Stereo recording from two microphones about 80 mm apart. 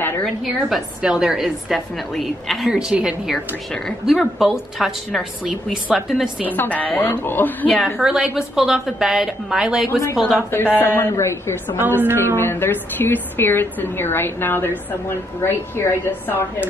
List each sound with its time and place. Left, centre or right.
0.2 s a woman's voice: centre
6.5 s a woman's voice: left
7.8 s a woman's voice: centre
10.5 s a man's voice: left
12.0 s speech: right
12.4 s a woman's voice: left